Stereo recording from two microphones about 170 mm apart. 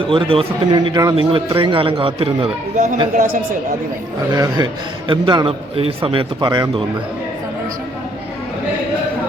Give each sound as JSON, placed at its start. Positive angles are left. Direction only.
{"t": 0.1, "sound": "a man's voice", "side_deg": -30}
{"t": 2.7, "sound": "a woman's voice", "side_deg": -50}
{"t": 4.4, "sound": "a man's voice", "side_deg": -25}